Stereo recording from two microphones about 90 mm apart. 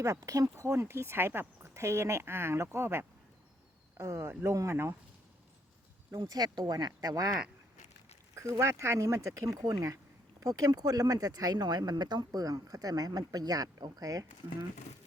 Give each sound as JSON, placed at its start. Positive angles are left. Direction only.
{"t": 0.0, "sound": "speech", "side_deg": -35}
{"t": 6.2, "sound": "speech", "side_deg": -50}
{"t": 8.4, "sound": "speech", "side_deg": -35}